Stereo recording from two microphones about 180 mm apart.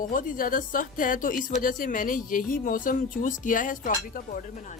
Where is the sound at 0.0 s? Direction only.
50° left (ahead or behind).